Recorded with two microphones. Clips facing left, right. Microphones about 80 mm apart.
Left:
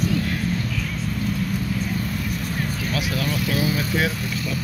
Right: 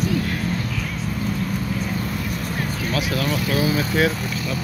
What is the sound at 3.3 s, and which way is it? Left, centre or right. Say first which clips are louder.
Speech: right 2 dB; right.